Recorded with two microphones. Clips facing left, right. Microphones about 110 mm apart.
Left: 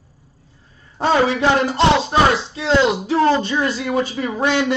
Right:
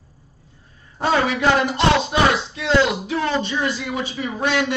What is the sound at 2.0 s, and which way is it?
Speech, 35° left (ahead or behind).